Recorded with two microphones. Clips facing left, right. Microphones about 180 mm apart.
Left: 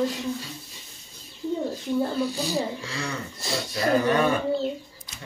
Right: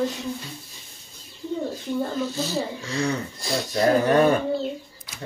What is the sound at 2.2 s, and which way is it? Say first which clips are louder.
Speech: even; 15° left (ahead or behind).